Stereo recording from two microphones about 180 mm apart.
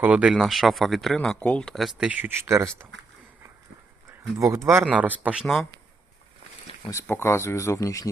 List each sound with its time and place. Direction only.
0.0 s speech: 5° right (ahead or behind)
4.4 s speech: 15° right (ahead or behind)
7.1 s speech: 15° left (ahead or behind)